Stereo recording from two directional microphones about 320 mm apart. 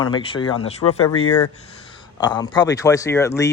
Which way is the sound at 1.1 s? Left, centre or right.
Left.